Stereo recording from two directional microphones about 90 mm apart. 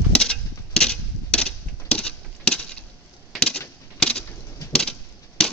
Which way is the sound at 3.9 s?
10° left (ahead or behind).